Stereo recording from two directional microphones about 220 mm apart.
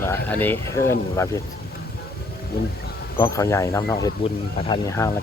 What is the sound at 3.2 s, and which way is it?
Speech, 15° left (ahead or behind).